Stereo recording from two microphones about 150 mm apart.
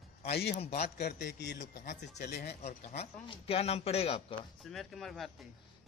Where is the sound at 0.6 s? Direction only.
45° left (ahead or behind).